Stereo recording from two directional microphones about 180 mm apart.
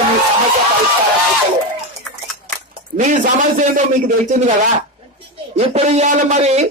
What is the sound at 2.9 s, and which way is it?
A man's voice, 45° right (ahead or behind).